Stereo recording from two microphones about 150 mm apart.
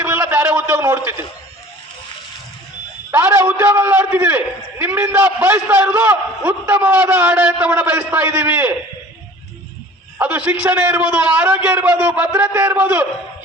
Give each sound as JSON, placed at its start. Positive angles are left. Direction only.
{"t": 0.0, "sound": "a sound", "side_deg": -15}
{"t": 3.1, "sound": "a man's voice", "side_deg": -20}
{"t": 10.2, "sound": "a man's voice", "side_deg": -10}